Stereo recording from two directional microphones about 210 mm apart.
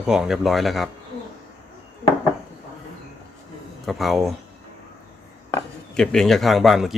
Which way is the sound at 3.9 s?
Centre (ahead or behind).